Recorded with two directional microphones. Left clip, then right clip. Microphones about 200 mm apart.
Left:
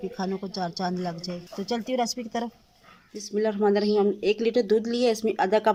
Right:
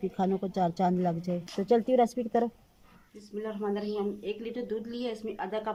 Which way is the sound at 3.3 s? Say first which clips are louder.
Left 10 dB; 45° left (ahead or behind).